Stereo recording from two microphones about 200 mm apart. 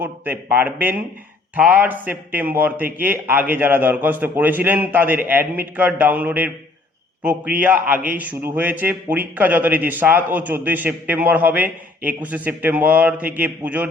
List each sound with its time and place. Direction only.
0.0 s a man's voice: 10° right (ahead or behind)